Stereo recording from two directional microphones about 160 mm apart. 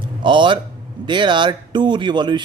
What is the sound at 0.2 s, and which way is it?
Speech, 30° right (ahead or behind).